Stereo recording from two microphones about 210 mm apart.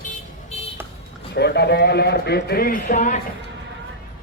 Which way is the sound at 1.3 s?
50° left (ahead or behind).